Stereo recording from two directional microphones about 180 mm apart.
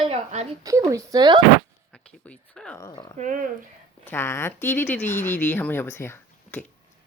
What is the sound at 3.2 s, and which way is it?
Speech, 45° right (ahead or behind).